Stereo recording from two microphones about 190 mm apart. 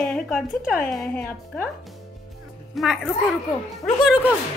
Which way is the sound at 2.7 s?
Centre (ahead or behind).